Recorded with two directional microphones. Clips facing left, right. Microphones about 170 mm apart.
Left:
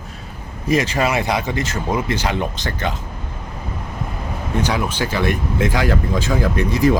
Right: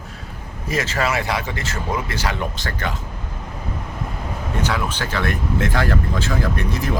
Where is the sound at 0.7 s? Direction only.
15° left (ahead or behind).